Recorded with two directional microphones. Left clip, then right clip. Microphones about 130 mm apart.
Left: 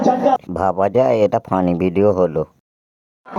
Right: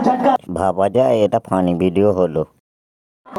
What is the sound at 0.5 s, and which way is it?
Speech, 20° right (ahead or behind).